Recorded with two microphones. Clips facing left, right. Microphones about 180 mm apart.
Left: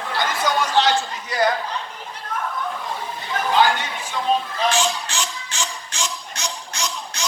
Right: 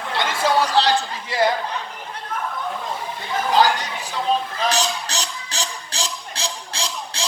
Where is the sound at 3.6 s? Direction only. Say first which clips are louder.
Right 1 dB; 35° right (ahead or behind).